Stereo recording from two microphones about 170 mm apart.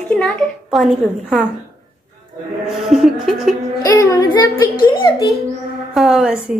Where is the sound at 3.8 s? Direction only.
20° left (ahead or behind).